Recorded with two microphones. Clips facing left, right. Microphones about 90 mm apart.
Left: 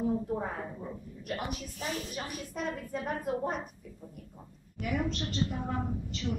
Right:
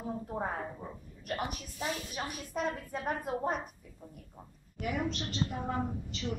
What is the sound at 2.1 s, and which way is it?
A woman's voice, 15° right (ahead or behind).